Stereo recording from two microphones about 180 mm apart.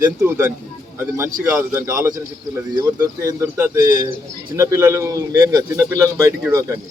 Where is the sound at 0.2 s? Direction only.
15° right (ahead or behind).